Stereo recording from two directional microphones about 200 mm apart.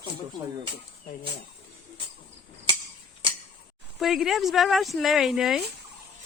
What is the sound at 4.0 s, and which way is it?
Speech, centre (ahead or behind).